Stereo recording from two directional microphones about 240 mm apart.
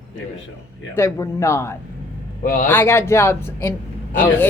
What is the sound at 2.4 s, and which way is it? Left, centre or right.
Speech, left.